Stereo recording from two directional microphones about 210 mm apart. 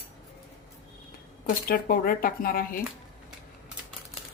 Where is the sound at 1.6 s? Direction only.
45° left (ahead or behind).